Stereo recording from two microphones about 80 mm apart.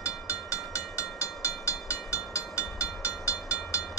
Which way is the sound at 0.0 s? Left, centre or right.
Left.